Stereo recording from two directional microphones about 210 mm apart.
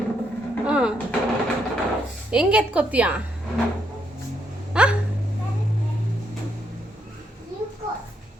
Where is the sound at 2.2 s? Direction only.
5° right (ahead or behind).